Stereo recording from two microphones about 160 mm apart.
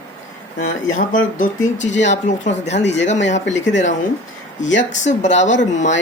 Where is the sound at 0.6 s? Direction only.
50° left (ahead or behind).